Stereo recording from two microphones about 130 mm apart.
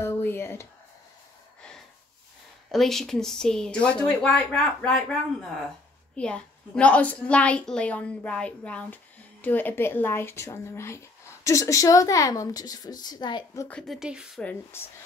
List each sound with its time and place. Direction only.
0.0 s a sound: 20° left (ahead or behind)
2.7 s a woman's voice: centre (ahead or behind); by 13.5 s 35° left (ahead or behind)
13.7 s a woman's voice: 5° left (ahead or behind)
13.9 s speech: 5° right (ahead or behind)
14.4 s a woman's voice: 15° left (ahead or behind)